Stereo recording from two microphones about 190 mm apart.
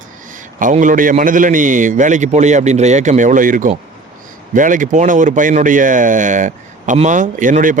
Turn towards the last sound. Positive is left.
turn(degrees=-45)  # may be behind; listen again after turning